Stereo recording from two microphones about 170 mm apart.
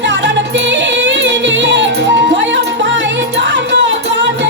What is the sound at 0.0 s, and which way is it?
Music, 90° right.